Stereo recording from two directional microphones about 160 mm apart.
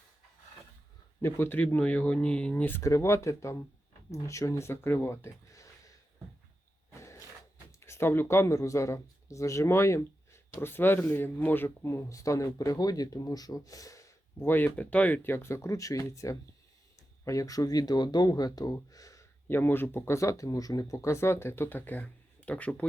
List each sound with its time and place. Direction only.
1.2 s speech: 15° left (ahead or behind)
6.9 s a sound: 20° left (ahead or behind)
7.8 s speech: 15° left (ahead or behind)